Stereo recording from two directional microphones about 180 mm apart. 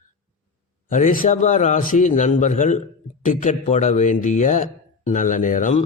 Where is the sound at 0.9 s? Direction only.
45° left (ahead or behind).